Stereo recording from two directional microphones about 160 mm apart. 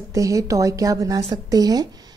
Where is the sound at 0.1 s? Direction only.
20° right (ahead or behind).